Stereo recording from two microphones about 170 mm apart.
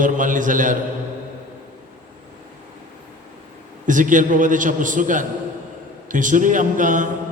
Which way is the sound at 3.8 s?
50° right (ahead or behind).